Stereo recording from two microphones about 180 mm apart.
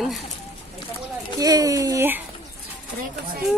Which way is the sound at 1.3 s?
20° right (ahead or behind).